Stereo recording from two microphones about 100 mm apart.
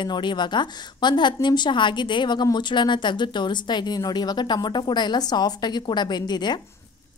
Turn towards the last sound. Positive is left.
turn(degrees=45)  # may be behind; listen again after turning